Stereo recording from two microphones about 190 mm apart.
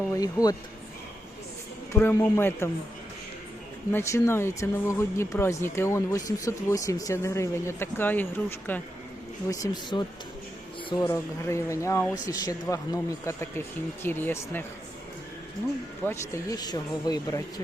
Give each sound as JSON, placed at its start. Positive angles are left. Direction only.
{"t": 0.1, "sound": "speech", "side_deg": 20}
{"t": 1.9, "sound": "speech", "side_deg": 15}
{"t": 3.9, "sound": "speech", "side_deg": 15}
{"t": 9.5, "sound": "speech", "side_deg": 20}
{"t": 16.0, "sound": "speech", "side_deg": 15}